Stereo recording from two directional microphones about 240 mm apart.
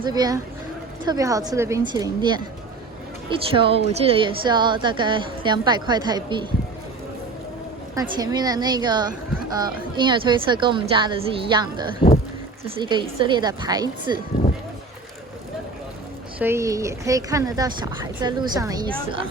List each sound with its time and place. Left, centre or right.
0.0 s a woman's voice: centre
7.9 s a woman's voice: centre
16.4 s speech: centre